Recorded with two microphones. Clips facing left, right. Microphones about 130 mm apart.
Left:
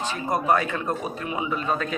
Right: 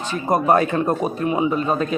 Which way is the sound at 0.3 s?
45° right (ahead or behind).